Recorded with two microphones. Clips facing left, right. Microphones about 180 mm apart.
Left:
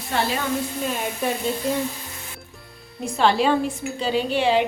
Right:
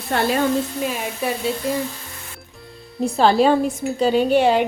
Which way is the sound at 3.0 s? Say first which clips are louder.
Right 4 dB; 40° right (ahead or behind).